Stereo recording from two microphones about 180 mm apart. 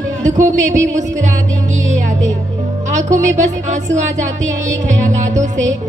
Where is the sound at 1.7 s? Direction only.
40° right (ahead or behind).